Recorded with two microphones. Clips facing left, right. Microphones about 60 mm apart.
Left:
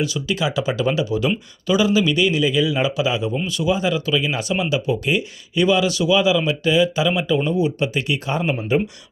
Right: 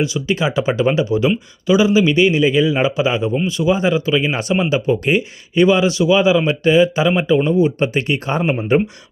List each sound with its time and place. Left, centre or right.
0.0 s speech: right